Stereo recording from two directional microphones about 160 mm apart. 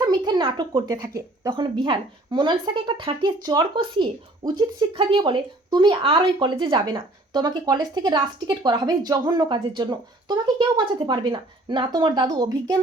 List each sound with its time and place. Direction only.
0.0 s a sound: 25° right (ahead or behind)
1.0 s speech: 15° right (ahead or behind)
1.5 s a woman's voice: 30° right (ahead or behind)